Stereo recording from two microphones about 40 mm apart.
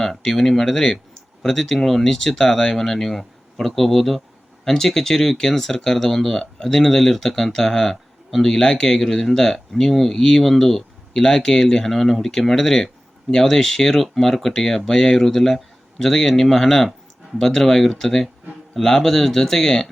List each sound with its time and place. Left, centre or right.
0.0 s speech: centre